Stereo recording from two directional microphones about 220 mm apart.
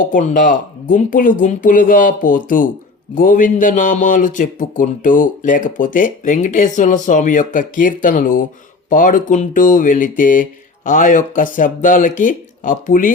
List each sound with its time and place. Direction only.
0.0 s a man's voice: 35° left (ahead or behind)